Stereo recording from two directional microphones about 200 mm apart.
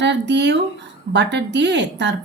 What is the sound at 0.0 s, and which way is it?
A woman's voice, 60° right (ahead or behind).